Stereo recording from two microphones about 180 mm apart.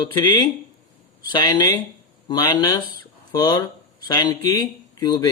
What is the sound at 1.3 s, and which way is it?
Speech, 25° left (ahead or behind).